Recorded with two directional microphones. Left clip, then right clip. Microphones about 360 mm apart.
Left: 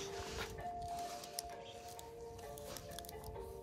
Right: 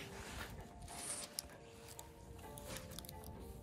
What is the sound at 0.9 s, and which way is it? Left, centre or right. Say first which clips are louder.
Music: left 6 dB; left.